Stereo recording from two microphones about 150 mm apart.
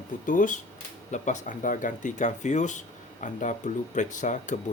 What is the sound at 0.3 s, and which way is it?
Speech, 60° left (ahead or behind).